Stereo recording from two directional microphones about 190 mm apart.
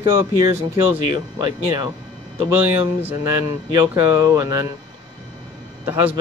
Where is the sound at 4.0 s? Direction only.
15° right (ahead or behind).